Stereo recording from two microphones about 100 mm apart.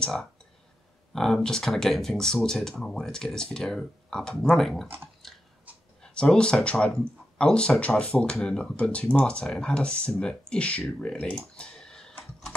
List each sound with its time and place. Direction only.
0.0 s speech: 5° left (ahead or behind)
4.8 s speech: 20° right (ahead or behind)
6.0 s speech: 10° left (ahead or behind)
11.5 s computer keyboard: 10° left (ahead or behind)